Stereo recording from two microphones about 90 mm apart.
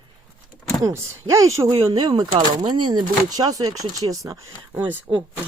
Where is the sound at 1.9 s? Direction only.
50° right (ahead or behind).